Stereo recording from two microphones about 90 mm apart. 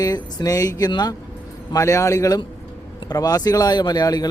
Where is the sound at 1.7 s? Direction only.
35° left (ahead or behind).